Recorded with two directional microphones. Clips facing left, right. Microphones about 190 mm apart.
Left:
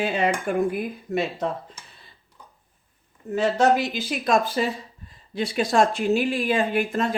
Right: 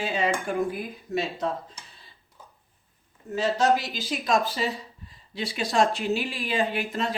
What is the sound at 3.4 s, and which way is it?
Speech, 55° left (ahead or behind).